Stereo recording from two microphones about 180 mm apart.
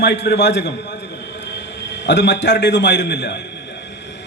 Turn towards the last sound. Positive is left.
turn(degrees=70)  # may be behind; listen again after turning